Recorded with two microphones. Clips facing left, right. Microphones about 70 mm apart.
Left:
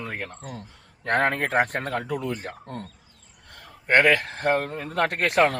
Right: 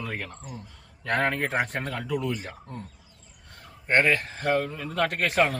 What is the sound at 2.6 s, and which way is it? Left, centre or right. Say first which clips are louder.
Speech: left 4 dB; left.